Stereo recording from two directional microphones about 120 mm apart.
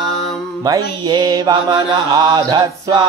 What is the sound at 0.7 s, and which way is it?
Mantra, 35° right (ahead or behind).